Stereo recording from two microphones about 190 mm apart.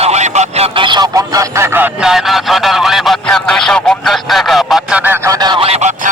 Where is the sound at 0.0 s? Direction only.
35° right (ahead or behind).